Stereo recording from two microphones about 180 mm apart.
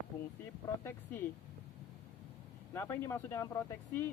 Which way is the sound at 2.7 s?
15° left (ahead or behind).